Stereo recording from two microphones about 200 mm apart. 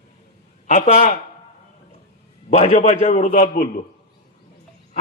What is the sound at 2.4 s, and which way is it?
A man's voice, 35° left (ahead or behind).